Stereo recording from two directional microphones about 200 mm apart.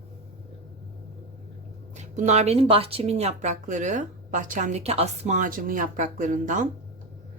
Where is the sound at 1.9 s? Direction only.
35° right (ahead or behind).